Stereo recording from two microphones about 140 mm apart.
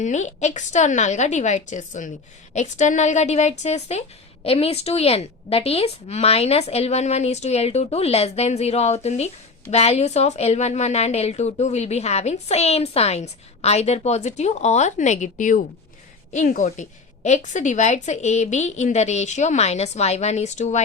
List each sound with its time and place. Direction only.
0.0 s a woman's voice: 55° left (ahead or behind)